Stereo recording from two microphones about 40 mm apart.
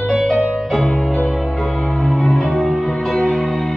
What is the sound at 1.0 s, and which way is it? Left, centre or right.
Music, centre.